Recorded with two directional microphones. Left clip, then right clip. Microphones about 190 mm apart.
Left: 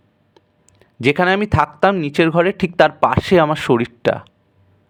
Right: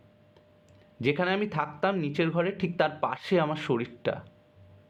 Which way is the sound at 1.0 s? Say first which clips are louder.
Left 12 dB; 45° left (ahead or behind).